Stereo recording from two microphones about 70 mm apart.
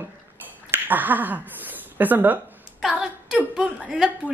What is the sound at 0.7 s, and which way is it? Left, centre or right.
Speech, right.